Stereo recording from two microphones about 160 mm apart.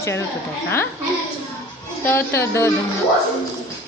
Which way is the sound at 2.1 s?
15° left (ahead or behind).